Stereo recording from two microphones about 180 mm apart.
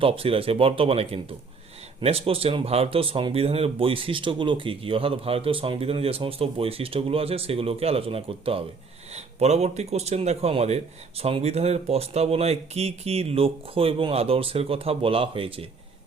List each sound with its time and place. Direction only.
0.0 s speech: 30° right (ahead or behind)